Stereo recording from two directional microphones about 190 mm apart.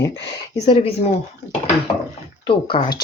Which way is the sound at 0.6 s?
30° left (ahead or behind).